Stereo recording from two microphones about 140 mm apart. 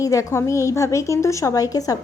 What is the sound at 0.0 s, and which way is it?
A woman's voice, 20° left (ahead or behind).